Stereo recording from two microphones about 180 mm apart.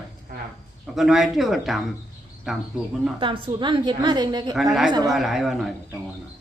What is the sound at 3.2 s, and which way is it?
A woman's voice, 25° right (ahead or behind).